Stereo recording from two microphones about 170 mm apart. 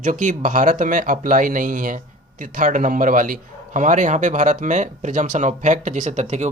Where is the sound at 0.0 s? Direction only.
45° right (ahead or behind).